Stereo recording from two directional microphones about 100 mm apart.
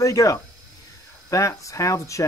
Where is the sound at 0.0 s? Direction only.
35° left (ahead or behind).